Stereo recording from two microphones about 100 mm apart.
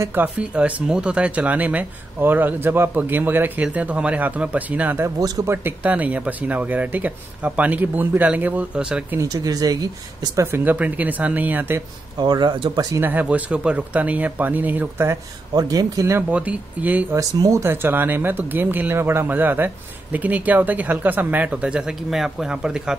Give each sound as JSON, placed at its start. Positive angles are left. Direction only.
{"t": 0.1, "sound": "speech", "side_deg": -15}
{"t": 5.2, "sound": "speech", "side_deg": -40}
{"t": 5.5, "sound": "speech", "side_deg": -20}
{"t": 9.2, "sound": "speech", "side_deg": -40}
{"t": 10.4, "sound": "speech", "side_deg": -20}
{"t": 12.2, "sound": "speech", "side_deg": -45}
{"t": 13.0, "sound": "speech", "side_deg": -15}
{"t": 15.5, "sound": "speech", "side_deg": -40}
{"t": 16.2, "sound": "speech", "side_deg": -15}
{"t": 17.1, "sound": "speech", "side_deg": -35}